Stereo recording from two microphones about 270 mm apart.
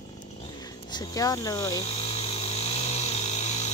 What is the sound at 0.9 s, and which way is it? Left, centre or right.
Insect, centre.